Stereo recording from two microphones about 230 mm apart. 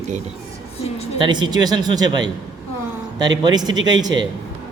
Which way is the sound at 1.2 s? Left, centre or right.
Centre.